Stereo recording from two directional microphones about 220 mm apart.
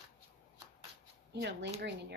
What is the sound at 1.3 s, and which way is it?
Speech, 50° right (ahead or behind).